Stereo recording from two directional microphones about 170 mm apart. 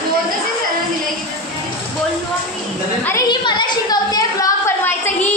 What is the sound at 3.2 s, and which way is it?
A woman's voice, 25° left (ahead or behind).